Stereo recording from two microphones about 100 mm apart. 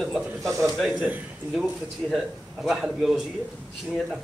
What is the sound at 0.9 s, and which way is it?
Speech, 15° right (ahead or behind).